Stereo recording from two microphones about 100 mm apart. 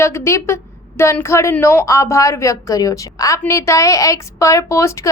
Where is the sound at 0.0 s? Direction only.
25° left (ahead or behind).